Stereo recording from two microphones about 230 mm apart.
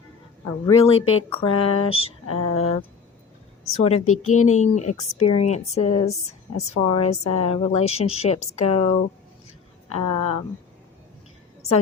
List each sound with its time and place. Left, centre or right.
0.6 s a woman's voice: left
4.0 s speech: left
4.3 s a woman's voice: left
9.9 s a woman's voice: left